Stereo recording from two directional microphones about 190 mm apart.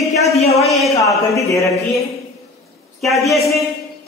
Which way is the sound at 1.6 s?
15° left (ahead or behind).